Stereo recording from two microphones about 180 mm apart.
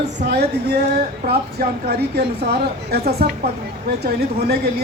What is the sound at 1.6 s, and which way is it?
A man's voice, 60° right (ahead or behind).